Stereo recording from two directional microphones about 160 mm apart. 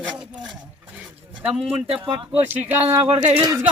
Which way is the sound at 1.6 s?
40° right (ahead or behind).